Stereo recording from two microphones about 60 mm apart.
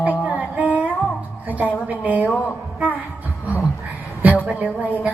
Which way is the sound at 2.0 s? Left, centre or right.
Right.